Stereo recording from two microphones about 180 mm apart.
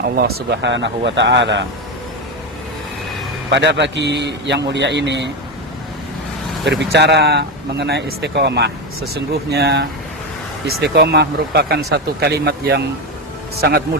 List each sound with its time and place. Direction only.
0.2 s a man's voice: 60° right (ahead or behind); by 1.6 s 80° right
3.5 s speech: 75° right (ahead or behind)
6.7 s speech: 70° right (ahead or behind)